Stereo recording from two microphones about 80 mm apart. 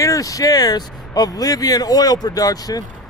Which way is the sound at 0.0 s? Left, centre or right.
Left.